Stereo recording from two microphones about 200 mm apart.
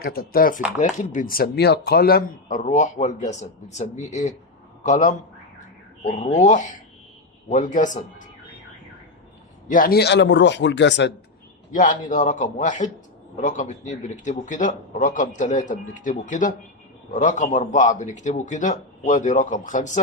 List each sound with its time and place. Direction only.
0.0 s a man's voice: 50° left (ahead or behind)
9.6 s speech: 45° left (ahead or behind); by 11.1 s 60° left (ahead or behind)
11.7 s speech: 40° left (ahead or behind)